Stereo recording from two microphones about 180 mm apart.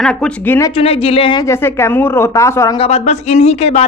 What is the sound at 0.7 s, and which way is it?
Speech, 30° left (ahead or behind).